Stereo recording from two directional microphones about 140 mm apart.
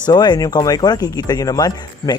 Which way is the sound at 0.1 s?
30° left (ahead or behind).